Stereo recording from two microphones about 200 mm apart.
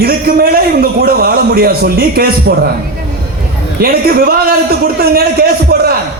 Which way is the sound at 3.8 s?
45° right (ahead or behind).